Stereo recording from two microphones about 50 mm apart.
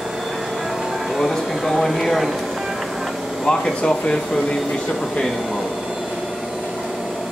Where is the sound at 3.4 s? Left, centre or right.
Centre.